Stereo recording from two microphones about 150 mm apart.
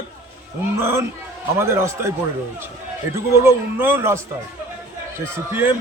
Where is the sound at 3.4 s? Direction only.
15° right (ahead or behind).